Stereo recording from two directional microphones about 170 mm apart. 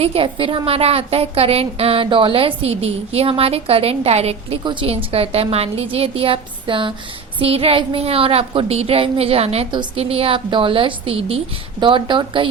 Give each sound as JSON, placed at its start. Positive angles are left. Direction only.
{"t": 0.0, "sound": "a woman's voice", "side_deg": -35}